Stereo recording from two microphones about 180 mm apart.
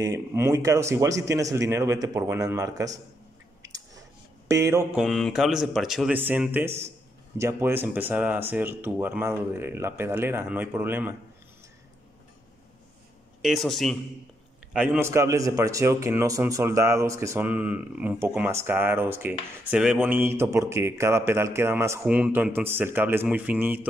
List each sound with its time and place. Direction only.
0.0 s a man's voice: 15° right (ahead or behind)
4.5 s a man's voice: 15° right (ahead or behind)
4.9 s a man's voice: centre (ahead or behind)
13.4 s a man's voice: centre (ahead or behind)